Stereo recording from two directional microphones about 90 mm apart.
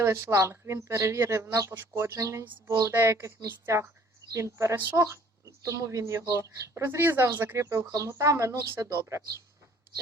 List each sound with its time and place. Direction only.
0.0 s speech: 30° right (ahead or behind)
5.6 s speech: 35° right (ahead or behind)